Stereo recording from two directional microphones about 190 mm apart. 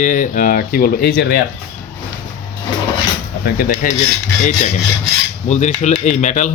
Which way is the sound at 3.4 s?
55° left (ahead or behind).